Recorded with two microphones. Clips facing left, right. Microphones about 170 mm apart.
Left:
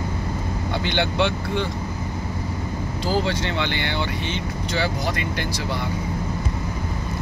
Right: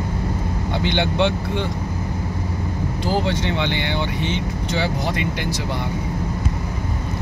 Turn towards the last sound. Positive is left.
turn(degrees=-20)  # may be behind; listen again after turning